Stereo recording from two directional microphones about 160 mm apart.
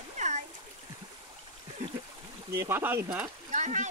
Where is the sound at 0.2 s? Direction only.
50° right (ahead or behind).